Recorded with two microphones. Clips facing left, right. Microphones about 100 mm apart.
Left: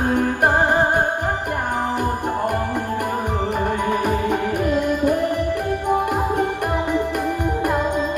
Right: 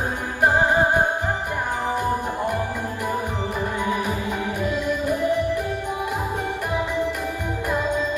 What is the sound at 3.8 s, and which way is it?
Music, 55° left (ahead or behind).